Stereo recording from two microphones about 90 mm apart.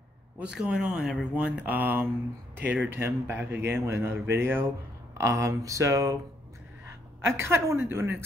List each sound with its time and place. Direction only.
0.4 s speech: 10° right (ahead or behind); by 6.1 s 35° right (ahead or behind)
7.2 s speech: 30° right (ahead or behind)